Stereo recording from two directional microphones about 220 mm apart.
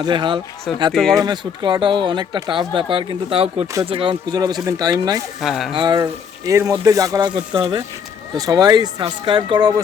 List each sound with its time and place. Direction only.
0.0 s speech: 20° right (ahead or behind)
0.7 s speech: centre (ahead or behind)
1.1 s speech: 20° right (ahead or behind)
5.4 s speech: centre (ahead or behind)
5.7 s speech: 20° right (ahead or behind)